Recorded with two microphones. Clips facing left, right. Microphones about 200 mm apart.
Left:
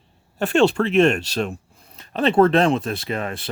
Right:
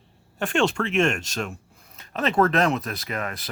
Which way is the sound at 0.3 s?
35° left (ahead or behind).